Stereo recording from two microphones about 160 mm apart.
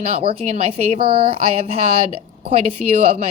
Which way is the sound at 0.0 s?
35° right (ahead or behind).